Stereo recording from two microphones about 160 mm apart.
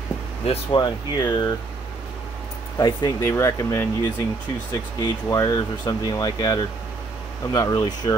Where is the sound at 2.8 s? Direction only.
25° left (ahead or behind).